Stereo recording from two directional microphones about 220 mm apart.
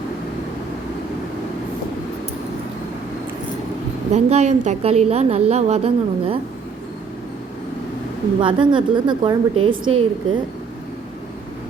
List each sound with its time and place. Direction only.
4.1 s a woman's voice: 30° right (ahead or behind)
8.4 s a woman's voice: 20° right (ahead or behind)
9.6 s a woman's voice: 65° right (ahead or behind)
9.9 s a woman's voice: 25° right (ahead or behind)